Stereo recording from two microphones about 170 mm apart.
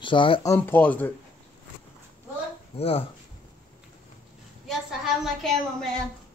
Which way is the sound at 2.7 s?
35° left (ahead or behind).